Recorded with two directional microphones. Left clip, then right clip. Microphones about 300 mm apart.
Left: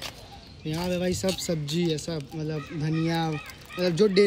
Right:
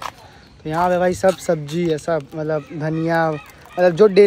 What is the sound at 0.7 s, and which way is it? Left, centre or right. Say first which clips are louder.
Speech: right 13 dB; centre.